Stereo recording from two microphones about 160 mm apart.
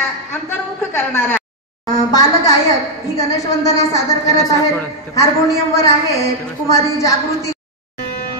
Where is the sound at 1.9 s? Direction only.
25° left (ahead or behind).